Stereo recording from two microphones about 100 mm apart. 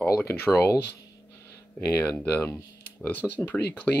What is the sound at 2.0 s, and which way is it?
Speech, 15° left (ahead or behind).